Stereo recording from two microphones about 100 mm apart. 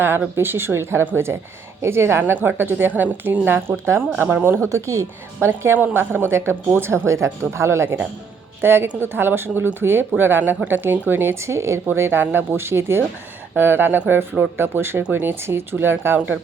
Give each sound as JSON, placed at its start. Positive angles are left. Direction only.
{"t": 0.0, "sound": "speech", "side_deg": -20}
{"t": 5.5, "sound": "speech", "side_deg": -20}